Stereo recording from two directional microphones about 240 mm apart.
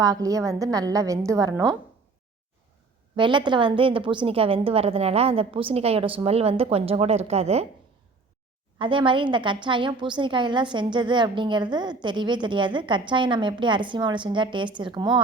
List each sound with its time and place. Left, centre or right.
0.0 s a woman's voice: centre
3.2 s a woman's voice: centre
8.8 s a woman's voice: right